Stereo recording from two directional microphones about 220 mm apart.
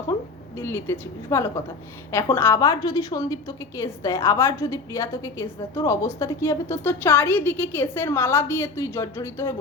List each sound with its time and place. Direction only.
0.6 s a woman's voice: 10° left (ahead or behind)